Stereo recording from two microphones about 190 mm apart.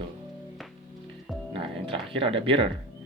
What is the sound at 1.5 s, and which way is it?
Speech, 25° right (ahead or behind).